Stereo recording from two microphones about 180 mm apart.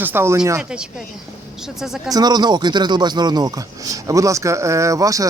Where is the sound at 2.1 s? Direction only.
20° right (ahead or behind).